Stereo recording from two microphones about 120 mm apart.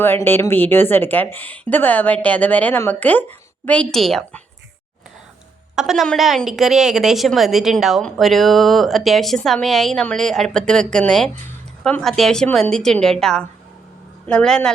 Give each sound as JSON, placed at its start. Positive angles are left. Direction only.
{"t": 0.0, "sound": "a woman's voice", "side_deg": 15}
{"t": 5.7, "sound": "a woman's voice", "side_deg": 0}